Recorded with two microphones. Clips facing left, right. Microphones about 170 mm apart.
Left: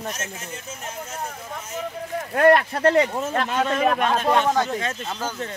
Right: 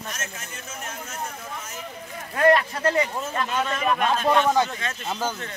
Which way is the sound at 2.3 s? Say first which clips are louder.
Left 2 dB; 55° left (ahead or behind).